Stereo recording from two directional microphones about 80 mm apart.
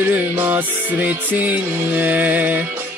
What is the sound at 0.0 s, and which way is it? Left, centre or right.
Music, right.